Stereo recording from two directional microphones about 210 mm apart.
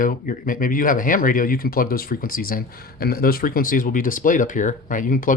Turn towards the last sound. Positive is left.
turn(degrees=40)  # may be behind; listen again after turning